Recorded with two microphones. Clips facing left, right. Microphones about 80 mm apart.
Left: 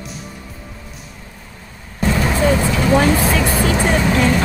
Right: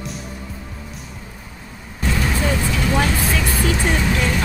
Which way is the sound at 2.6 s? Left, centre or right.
Centre.